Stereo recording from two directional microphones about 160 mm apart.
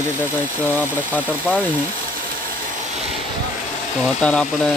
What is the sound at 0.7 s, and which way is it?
Speech, 10° left (ahead or behind).